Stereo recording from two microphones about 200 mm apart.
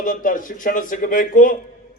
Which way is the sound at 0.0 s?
40° left (ahead or behind).